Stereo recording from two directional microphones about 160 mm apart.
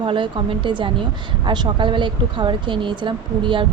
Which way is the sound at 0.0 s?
30° right (ahead or behind).